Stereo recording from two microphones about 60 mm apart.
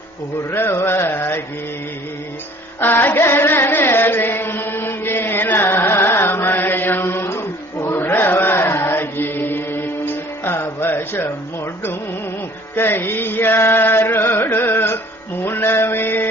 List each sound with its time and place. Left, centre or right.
0.5 s carnatic music: left
2.8 s carnatic music: left
3.8 s chant: left
12.7 s music: left
15.4 s mantra: left